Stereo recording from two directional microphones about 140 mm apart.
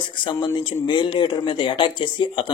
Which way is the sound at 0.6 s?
35° left (ahead or behind).